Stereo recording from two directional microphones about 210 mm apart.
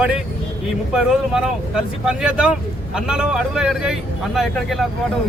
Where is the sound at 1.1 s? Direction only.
Centre (ahead or behind).